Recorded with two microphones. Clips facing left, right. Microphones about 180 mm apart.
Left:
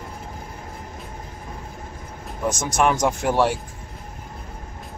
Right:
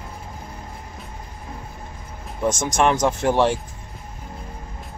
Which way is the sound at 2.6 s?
10° left (ahead or behind).